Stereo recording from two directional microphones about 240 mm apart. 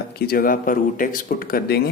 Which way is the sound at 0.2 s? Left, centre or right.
Left.